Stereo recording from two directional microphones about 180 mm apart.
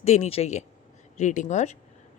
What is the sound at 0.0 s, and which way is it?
Speech, 35° left (ahead or behind).